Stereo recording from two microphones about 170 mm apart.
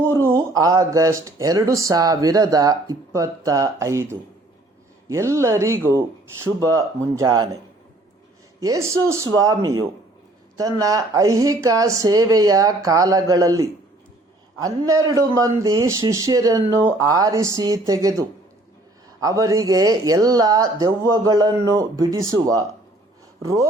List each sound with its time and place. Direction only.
0.1 s speech: 15° right (ahead or behind)
8.6 s speech: 20° right (ahead or behind)